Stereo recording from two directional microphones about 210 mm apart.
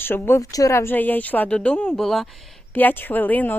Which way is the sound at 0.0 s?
10° left (ahead or behind).